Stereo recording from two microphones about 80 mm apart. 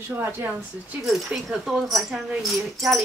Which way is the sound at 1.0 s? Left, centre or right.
Centre.